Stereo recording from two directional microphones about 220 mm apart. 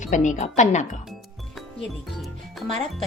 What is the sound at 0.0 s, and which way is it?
Speech, 35° left (ahead or behind).